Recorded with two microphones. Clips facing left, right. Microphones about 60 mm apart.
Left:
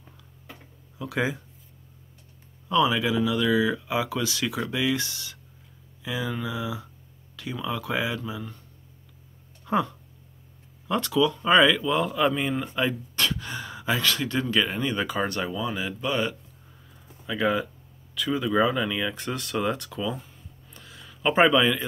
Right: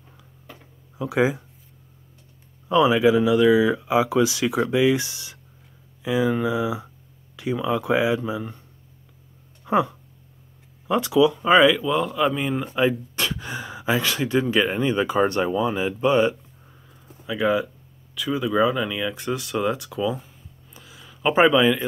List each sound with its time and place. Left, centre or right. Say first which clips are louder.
0.9 s speech: right 6 dB; centre
2.7 s speech: right 6 dB; centre
9.7 s speech: right 4 dB; centre
12.7 s speech: right 5 dB; centre
17.3 s speech: right 3 dB; centre
20.7 s a sound: right 1 dB; centre